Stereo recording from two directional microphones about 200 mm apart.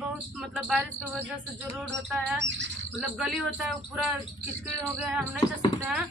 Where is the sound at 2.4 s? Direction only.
60° right (ahead or behind).